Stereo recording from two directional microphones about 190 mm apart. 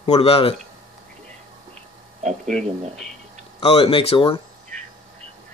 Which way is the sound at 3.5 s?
30° left (ahead or behind).